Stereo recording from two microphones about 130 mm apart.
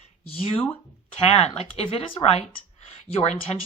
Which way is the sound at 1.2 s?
50° left (ahead or behind).